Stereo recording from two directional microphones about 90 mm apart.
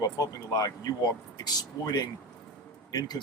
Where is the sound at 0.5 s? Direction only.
45° left (ahead or behind).